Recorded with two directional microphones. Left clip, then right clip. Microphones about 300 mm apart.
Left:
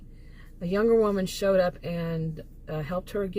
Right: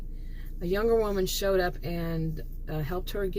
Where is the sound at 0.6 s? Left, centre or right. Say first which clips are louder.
Left 3 dB; centre.